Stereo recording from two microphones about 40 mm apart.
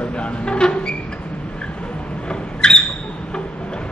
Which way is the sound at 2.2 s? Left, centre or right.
Left.